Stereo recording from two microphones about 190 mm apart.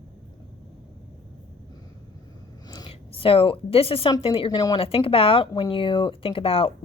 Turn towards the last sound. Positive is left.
turn(degrees=30)  # may be behind; listen again after turning